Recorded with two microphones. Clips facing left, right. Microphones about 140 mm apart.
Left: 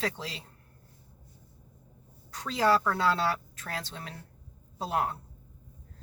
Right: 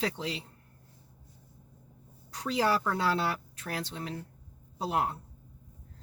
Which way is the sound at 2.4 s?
15° right (ahead or behind).